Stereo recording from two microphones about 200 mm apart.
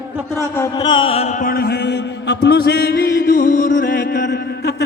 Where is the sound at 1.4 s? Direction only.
50° left (ahead or behind).